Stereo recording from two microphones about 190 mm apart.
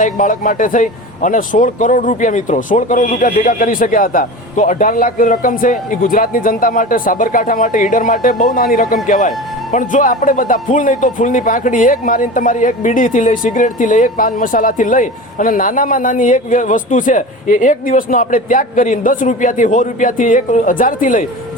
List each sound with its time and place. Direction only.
0.0 s speech: 45° left (ahead or behind)